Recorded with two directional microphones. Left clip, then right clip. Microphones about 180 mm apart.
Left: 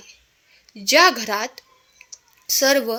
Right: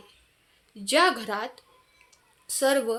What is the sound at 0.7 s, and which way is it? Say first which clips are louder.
A woman's voice: left 7 dB; 30° left (ahead or behind).